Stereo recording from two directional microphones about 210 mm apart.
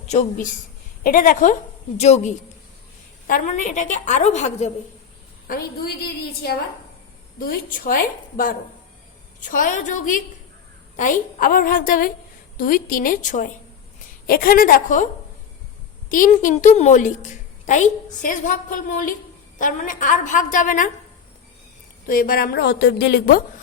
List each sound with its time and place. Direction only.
0.1 s a woman's voice: 35° left (ahead or behind)
5.5 s a woman's voice: 45° left (ahead or behind)
22.0 s a woman's voice: 45° left (ahead or behind)